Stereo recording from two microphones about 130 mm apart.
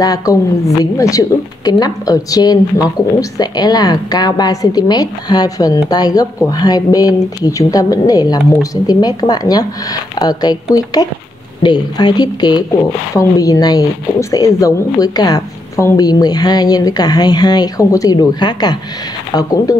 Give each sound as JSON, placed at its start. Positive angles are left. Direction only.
{"t": 0.0, "sound": "a woman's voice", "side_deg": 25}